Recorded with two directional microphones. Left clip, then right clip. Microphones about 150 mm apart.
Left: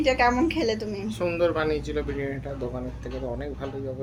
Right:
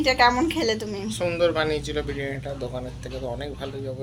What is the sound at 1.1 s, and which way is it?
Speech, 25° left (ahead or behind).